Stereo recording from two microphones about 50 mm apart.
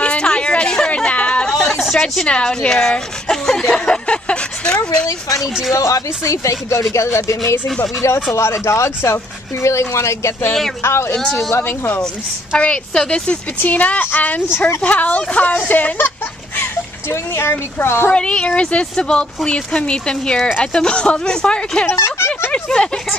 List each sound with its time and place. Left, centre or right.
0.0 s a sound: centre
1.5 s a sound: centre
2.2 s speech: left
5.7 s speech: left
11.1 s speech: centre
11.5 s speech: left
12.5 s speech: left
13.6 s speech: left
17.1 s speech: left
18.1 s speech: centre
21.9 s speech: left
22.5 s speech: centre